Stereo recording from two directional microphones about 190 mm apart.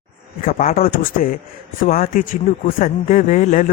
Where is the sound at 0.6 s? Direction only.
50° left (ahead or behind).